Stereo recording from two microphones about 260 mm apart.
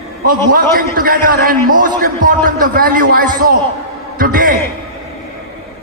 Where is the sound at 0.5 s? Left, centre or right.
Right.